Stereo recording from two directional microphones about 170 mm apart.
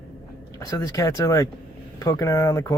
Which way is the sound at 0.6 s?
20° left (ahead or behind).